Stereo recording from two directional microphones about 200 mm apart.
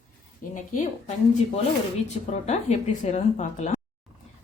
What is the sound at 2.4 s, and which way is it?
Speech, 35° left (ahead or behind).